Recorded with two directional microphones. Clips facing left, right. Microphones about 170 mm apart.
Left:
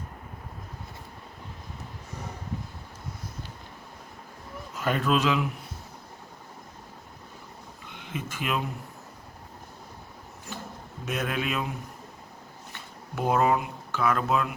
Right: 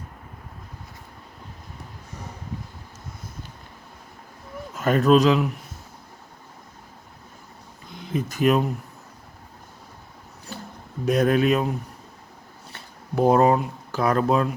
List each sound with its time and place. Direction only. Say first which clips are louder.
4.8 s a man's voice: right 8 dB; 45° right (ahead or behind)
7.9 s speech: right 8 dB; 35° right (ahead or behind)
11.0 s a man's voice: right 11 dB; 35° right (ahead or behind)
12.7 s speech: right 10 dB; 35° right (ahead or behind)